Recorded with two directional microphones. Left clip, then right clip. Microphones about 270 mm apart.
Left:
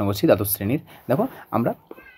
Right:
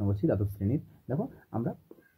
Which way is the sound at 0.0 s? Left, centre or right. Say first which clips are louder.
Left 12 dB; left.